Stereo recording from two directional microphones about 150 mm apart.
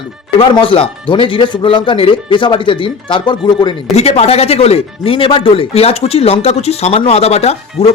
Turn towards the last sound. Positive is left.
turn(degrees=45)  # may be behind; listen again after turning